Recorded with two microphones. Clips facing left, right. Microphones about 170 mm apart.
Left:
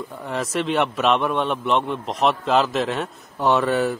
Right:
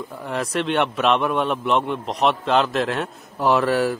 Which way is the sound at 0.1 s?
Centre (ahead or behind).